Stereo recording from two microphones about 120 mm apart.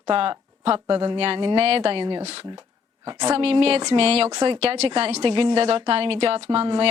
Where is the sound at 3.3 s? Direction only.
55° right (ahead or behind).